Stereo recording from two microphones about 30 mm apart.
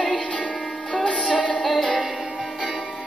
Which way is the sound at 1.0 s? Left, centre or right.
Left.